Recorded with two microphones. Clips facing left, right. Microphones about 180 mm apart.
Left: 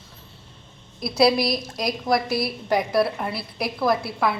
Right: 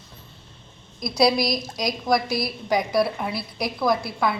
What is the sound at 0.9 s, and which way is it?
A woman's voice, 5° left (ahead or behind).